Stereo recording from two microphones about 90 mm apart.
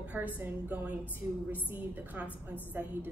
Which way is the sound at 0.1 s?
20° right (ahead or behind).